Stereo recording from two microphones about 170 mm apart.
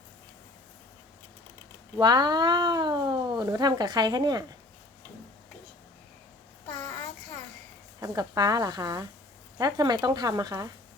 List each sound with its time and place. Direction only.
2.0 s speech: 25° right (ahead or behind)
8.0 s speech: 20° right (ahead or behind)